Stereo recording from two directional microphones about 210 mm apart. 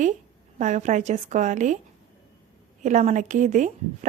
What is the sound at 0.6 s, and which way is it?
A woman's voice, 35° right (ahead or behind).